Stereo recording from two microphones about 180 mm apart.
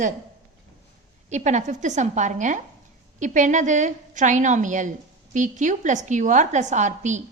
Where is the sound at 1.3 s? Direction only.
40° right (ahead or behind).